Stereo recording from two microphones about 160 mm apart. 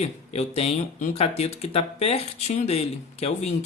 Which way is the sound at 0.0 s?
40° left (ahead or behind).